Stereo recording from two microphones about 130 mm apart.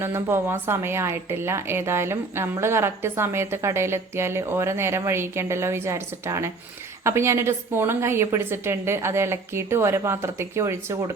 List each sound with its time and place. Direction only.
0.0 s a woman's voice: 20° right (ahead or behind)